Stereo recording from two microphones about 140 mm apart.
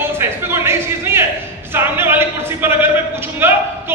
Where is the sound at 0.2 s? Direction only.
15° right (ahead or behind).